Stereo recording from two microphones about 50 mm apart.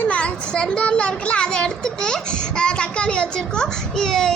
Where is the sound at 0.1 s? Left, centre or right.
Centre.